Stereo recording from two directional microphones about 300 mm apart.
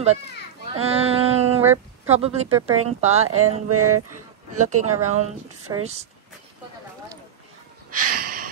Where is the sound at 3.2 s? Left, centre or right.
Right.